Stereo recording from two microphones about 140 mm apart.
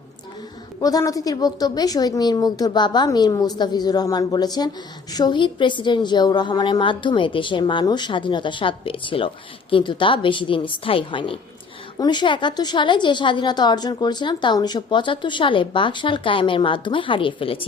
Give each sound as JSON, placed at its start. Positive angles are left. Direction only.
{"t": 0.8, "sound": "a woman's voice", "side_deg": 25}